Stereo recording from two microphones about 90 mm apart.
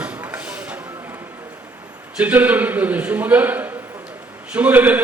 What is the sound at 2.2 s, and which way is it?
A man's voice, 15° right (ahead or behind).